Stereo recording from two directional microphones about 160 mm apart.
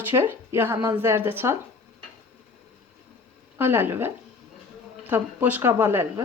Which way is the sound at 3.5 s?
15° right (ahead or behind).